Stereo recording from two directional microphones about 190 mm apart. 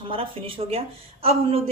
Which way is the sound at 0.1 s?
30° right (ahead or behind).